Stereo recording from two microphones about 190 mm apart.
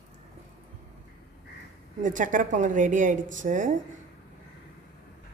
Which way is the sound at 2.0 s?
45° right (ahead or behind).